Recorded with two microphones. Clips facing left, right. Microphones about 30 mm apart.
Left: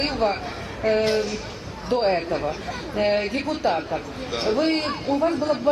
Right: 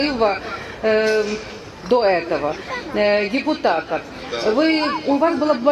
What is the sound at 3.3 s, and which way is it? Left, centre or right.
Speech, right.